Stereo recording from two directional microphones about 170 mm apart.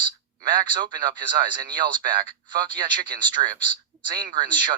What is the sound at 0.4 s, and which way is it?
A man's voice, 25° right (ahead or behind).